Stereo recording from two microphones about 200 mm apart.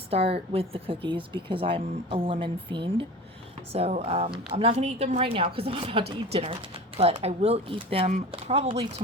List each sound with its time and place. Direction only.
0.1 s speech: 30° right (ahead or behind)